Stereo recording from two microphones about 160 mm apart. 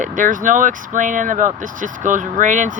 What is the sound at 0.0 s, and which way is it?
Speech, 55° right (ahead or behind).